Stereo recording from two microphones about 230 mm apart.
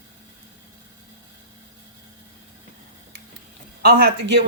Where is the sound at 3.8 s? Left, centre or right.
Right.